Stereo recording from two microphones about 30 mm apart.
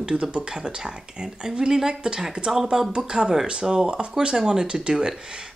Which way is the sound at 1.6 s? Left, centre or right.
Right.